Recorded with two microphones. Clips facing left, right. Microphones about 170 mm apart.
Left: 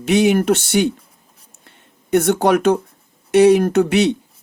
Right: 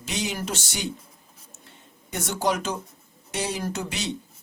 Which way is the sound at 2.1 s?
60° left (ahead or behind).